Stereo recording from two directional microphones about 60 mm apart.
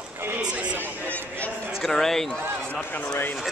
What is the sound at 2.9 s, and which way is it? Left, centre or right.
Speech, left.